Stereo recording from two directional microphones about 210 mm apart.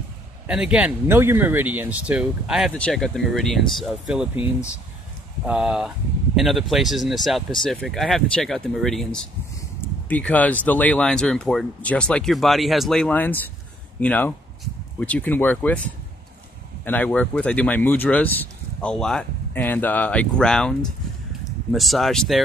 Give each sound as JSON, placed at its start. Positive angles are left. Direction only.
{"t": 0.5, "sound": "speech", "side_deg": -5}
{"t": 5.5, "sound": "speech", "side_deg": -5}
{"t": 21.7, "sound": "speech", "side_deg": 0}